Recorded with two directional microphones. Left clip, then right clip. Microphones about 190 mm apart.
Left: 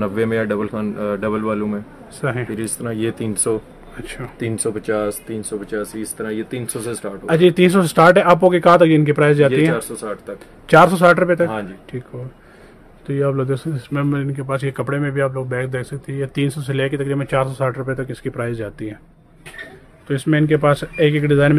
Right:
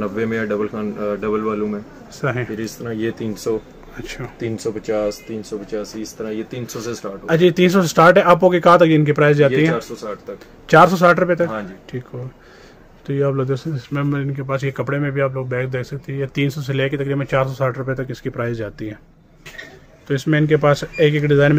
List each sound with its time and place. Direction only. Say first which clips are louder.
0.0 s speech: left 2 dB; 50° left (ahead or behind)
2.1 s speech: right 1 dB; centre (ahead or behind)
2.5 s speech: left 1 dB; 50° left (ahead or behind)
3.9 s speech: even; centre (ahead or behind)
4.4 s speech: left 2 dB; 50° left (ahead or behind)
7.2 s speech: left 1 dB; 5° left (ahead or behind)
10.7 s a man's voice: even; 5° left (ahead or behind)
11.9 s speech: right 1 dB; 5° right (ahead or behind)
20.1 s speech: even; centre (ahead or behind)